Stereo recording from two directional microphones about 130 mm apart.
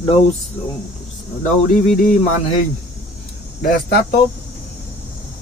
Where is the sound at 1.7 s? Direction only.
80° left.